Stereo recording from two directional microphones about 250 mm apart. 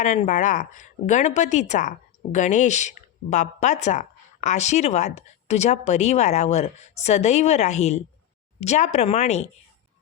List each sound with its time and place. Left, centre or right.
0.0 s speech: left